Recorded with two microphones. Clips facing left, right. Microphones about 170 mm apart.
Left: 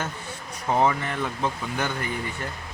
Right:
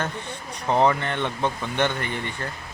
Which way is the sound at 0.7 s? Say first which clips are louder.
Right 2 dB; 5° left (ahead or behind).